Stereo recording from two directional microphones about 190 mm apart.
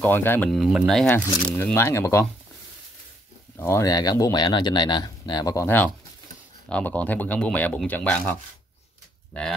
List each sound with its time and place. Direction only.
0.0 s speech: 10° left (ahead or behind)
3.5 s speech: 15° left (ahead or behind)
9.3 s speech: 5° left (ahead or behind)